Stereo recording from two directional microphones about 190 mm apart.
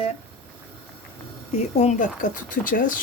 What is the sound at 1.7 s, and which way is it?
Speech, 35° left (ahead or behind).